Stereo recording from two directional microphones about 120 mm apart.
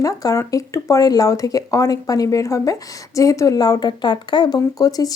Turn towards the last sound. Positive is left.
turn(degrees=30)  # may be behind; listen again after turning